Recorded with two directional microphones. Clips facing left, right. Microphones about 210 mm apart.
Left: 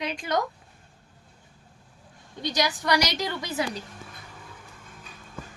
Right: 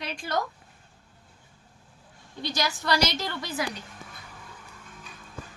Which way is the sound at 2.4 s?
20° left (ahead or behind).